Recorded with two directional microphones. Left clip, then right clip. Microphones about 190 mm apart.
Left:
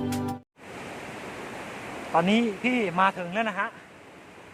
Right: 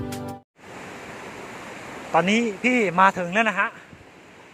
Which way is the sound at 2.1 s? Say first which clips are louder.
Right 3 dB; 10° right (ahead or behind).